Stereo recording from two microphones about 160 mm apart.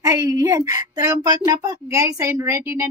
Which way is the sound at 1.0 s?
25° right (ahead or behind).